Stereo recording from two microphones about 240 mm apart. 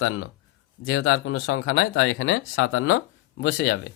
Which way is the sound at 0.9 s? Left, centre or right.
Left.